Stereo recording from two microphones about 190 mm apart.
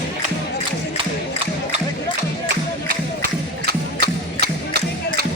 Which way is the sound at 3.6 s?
55° right (ahead or behind).